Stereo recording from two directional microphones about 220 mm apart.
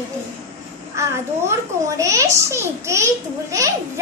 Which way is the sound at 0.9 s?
10° right (ahead or behind).